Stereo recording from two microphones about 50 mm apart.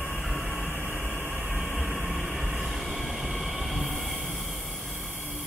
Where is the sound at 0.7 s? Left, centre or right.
Left.